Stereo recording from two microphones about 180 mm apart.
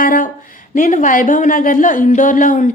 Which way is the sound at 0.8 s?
45° left (ahead or behind).